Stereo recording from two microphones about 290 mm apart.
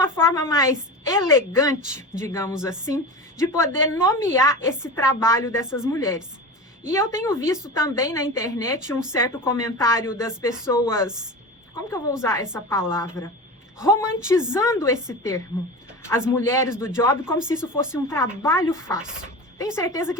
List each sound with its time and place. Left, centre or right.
0.0 s a woman's voice: centre
18.9 s speech: centre
19.5 s a woman's voice: centre